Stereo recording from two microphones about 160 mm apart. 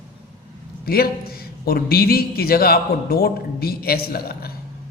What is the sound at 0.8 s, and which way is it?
A man's voice, 70° left (ahead or behind).